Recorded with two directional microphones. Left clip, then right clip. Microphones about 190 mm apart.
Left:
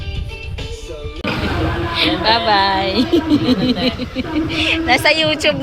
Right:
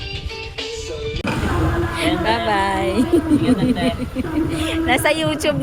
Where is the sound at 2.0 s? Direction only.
10° right (ahead or behind).